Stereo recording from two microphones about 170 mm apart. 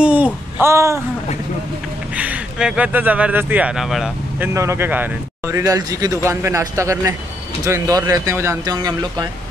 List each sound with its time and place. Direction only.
0.0 s a sound: 10° right (ahead or behind)
2.1 s speech: 10° right (ahead or behind)
4.6 s speech: 15° right (ahead or behind)
5.6 s speech: 20° right (ahead or behind)